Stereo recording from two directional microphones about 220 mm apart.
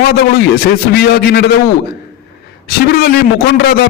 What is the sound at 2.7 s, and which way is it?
A man's voice, 45° left (ahead or behind).